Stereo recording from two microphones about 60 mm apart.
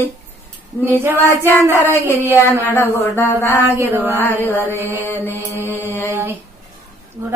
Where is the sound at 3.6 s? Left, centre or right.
Right.